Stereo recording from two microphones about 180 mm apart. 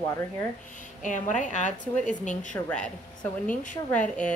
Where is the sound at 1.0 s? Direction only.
45° left (ahead or behind).